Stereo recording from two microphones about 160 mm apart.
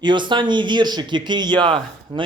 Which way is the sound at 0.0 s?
30° right (ahead or behind).